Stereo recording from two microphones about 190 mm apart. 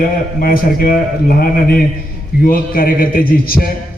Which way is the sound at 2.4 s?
50° left (ahead or behind).